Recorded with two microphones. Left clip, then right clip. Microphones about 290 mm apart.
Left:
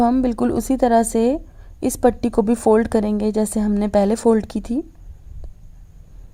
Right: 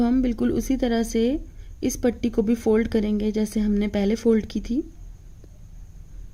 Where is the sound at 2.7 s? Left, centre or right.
Centre.